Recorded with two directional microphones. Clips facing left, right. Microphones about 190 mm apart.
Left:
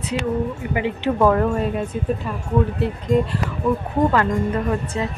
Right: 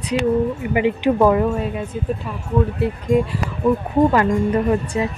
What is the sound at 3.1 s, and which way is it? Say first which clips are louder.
Speech: right 1 dB; 5° right (ahead or behind).